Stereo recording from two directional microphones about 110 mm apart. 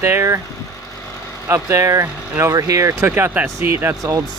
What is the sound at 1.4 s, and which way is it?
Speech, 30° right (ahead or behind).